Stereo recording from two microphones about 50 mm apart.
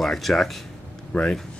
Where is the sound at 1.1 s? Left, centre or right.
Left.